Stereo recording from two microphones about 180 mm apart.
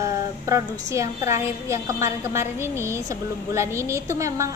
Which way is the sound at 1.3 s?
15° right (ahead or behind).